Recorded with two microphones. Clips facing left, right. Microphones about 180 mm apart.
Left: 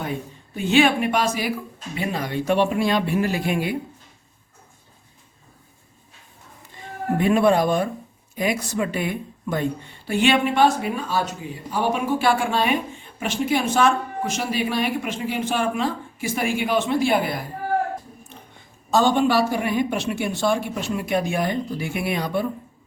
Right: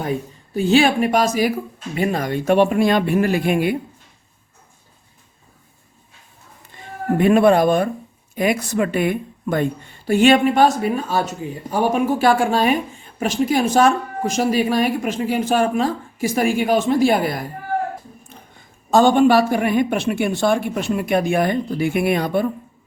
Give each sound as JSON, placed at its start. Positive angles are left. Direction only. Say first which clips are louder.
{"t": 0.5, "sound": "speech", "louder": "right 3 dB", "side_deg": -35}
{"t": 7.2, "sound": "a woman's voice", "louder": "right 4 dB", "side_deg": -55}
{"t": 10.1, "sound": "speech", "louder": "right 6 dB", "side_deg": -45}
{"t": 18.9, "sound": "a woman's voice", "louder": "right 5 dB", "side_deg": -50}